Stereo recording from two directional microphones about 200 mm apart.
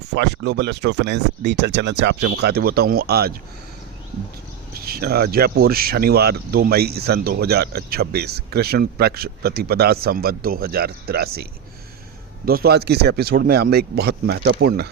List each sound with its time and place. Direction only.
0.1 s speech: 60° right (ahead or behind)
4.9 s speech: 50° right (ahead or behind)
12.5 s speech: 50° right (ahead or behind)